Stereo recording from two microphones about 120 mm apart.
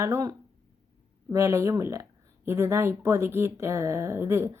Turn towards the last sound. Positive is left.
turn(degrees=-25)  # may be behind; listen again after turning